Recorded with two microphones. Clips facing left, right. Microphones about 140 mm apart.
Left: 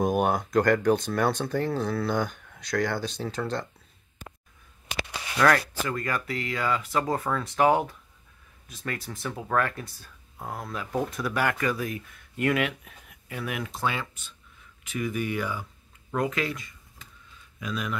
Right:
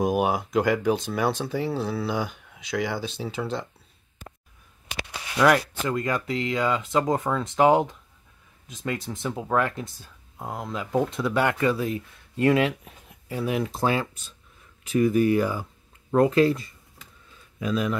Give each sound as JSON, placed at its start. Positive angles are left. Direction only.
{"t": 0.0, "sound": "speech", "side_deg": -5}
{"t": 4.9, "sound": "a sound", "side_deg": 45}
{"t": 5.4, "sound": "speech", "side_deg": -20}